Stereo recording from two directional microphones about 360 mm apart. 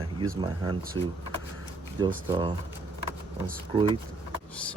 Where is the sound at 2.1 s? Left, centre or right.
Centre.